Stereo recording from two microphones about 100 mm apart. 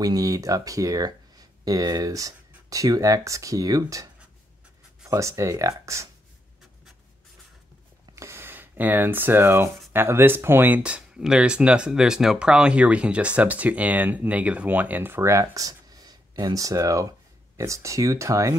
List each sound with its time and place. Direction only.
0.0 s speech: 40° right (ahead or behind)
8.1 s a sound: 30° right (ahead or behind)
9.9 s speech: 25° right (ahead or behind)